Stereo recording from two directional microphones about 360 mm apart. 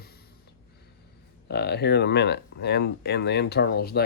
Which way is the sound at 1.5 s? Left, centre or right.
Left.